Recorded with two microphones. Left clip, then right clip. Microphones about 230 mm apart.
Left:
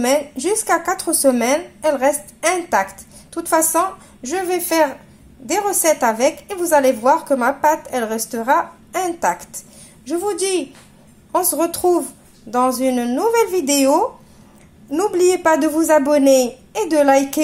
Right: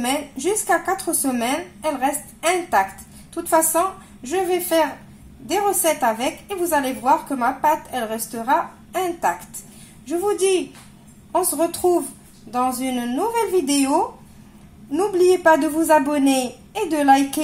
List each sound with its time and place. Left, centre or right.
0.0 s a woman's voice: left